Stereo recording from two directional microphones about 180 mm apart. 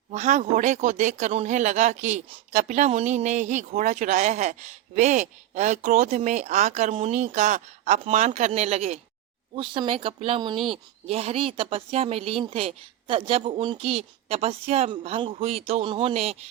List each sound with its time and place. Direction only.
0.1 s speech: 40° right (ahead or behind)